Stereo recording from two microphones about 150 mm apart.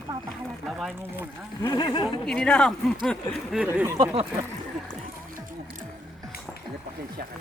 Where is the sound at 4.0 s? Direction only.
40° right (ahead or behind).